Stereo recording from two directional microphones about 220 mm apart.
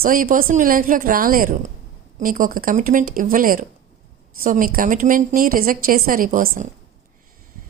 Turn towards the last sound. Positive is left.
turn(degrees=-40)  # may be behind; listen again after turning